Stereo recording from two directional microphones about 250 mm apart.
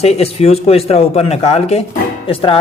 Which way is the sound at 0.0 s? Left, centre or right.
Left.